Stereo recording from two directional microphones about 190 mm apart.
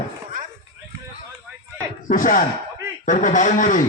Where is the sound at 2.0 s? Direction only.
45° left (ahead or behind).